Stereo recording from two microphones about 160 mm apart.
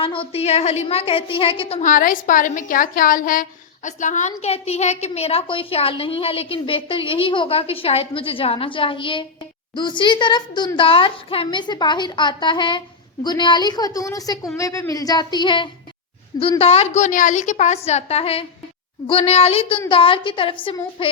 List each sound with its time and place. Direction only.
0.0 s a woman's voice: 35° left (ahead or behind)
1.8 s a woman's voice: 55° left (ahead or behind); by 21.1 s 35° left (ahead or behind)